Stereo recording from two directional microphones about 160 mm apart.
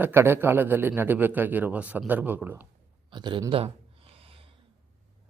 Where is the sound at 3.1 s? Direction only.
30° right (ahead or behind).